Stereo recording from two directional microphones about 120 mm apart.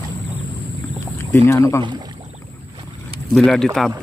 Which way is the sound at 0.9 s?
25° left (ahead or behind).